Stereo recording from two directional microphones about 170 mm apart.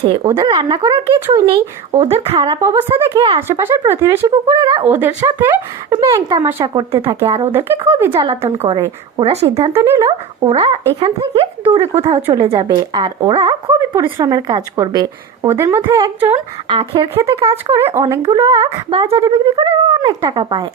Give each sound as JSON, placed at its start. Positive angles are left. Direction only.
{"t": 0.2, "sound": "a woman's voice", "side_deg": -20}
{"t": 2.0, "sound": "a woman's voice", "side_deg": -35}
{"t": 6.6, "sound": "a woman's voice", "side_deg": -35}
{"t": 7.4, "sound": "speech", "side_deg": -15}
{"t": 8.1, "sound": "a woman's voice", "side_deg": -30}
{"t": 9.7, "sound": "speech", "side_deg": -15}
{"t": 10.1, "sound": "a woman's voice", "side_deg": -35}
{"t": 16.6, "sound": "a woman's voice", "side_deg": -30}
{"t": 18.3, "sound": "a woman's voice", "side_deg": -20}